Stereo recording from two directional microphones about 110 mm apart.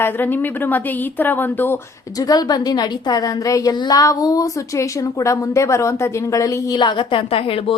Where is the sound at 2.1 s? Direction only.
35° left (ahead or behind).